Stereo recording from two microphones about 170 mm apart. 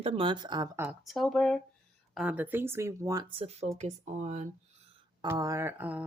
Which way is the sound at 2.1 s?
10° right (ahead or behind).